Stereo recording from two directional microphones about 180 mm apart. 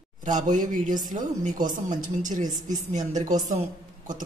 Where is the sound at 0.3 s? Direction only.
45° right (ahead or behind).